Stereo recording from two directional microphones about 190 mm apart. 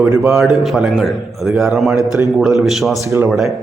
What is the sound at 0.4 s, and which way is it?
A man's voice, centre (ahead or behind).